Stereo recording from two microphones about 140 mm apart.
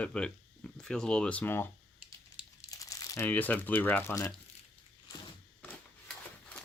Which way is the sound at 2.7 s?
25° left (ahead or behind).